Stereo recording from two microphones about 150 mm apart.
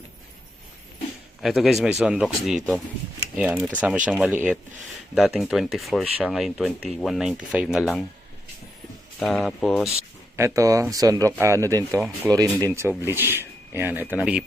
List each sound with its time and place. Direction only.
1.4 s speech: centre (ahead or behind)
9.1 s speech: centre (ahead or behind)
10.3 s speech: 20° right (ahead or behind)
11.9 s speech: 5° right (ahead or behind)
12.3 s speech: 25° right (ahead or behind); by 14.4 s 10° right (ahead or behind)